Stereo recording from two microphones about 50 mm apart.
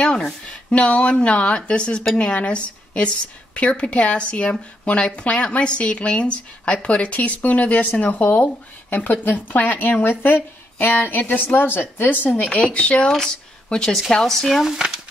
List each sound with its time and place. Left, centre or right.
0.5 s speech: left
12.4 s speech: left; by 14.6 s centre